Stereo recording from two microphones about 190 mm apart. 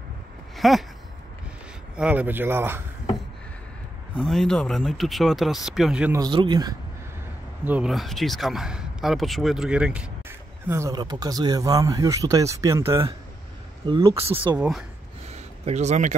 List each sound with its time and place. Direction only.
0.6 s a sound: centre (ahead or behind)
2.0 s speech: 5° right (ahead or behind)
4.1 s speech: centre (ahead or behind)
6.1 s speech: 25° right (ahead or behind)
7.6 s speech: 5° right (ahead or behind)
10.7 s speech: 15° right (ahead or behind)
13.8 s speech: 25° right (ahead or behind)
14.6 s speech: centre (ahead or behind)
15.2 s a sound: 35° right (ahead or behind)